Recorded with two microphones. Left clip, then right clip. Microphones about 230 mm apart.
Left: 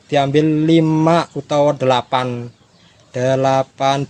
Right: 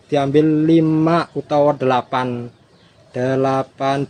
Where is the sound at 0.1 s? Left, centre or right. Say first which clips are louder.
Even; left.